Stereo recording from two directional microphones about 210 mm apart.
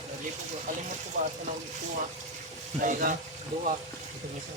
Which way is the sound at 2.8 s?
40° right (ahead or behind).